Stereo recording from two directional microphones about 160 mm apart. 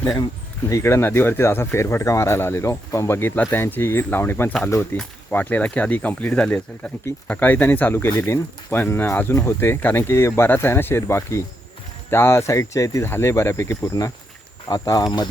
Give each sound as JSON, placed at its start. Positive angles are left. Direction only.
{"t": 0.0, "sound": "speech", "side_deg": 20}